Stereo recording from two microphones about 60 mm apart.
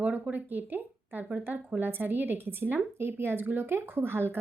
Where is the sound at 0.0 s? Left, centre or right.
Right.